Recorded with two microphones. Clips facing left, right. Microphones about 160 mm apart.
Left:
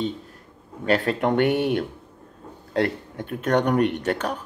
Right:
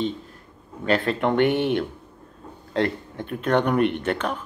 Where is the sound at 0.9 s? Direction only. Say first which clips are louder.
Even; 45° left (ahead or behind).